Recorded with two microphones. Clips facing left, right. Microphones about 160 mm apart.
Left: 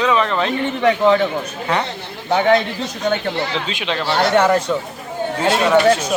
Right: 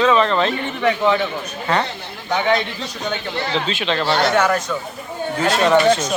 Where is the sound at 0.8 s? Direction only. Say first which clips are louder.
Left 3 dB; 35° left (ahead or behind).